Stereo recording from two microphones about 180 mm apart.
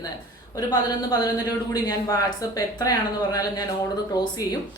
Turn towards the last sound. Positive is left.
turn(degrees=20)  # may be behind; listen again after turning